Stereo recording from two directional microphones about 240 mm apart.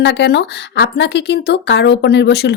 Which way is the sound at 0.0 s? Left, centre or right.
Left.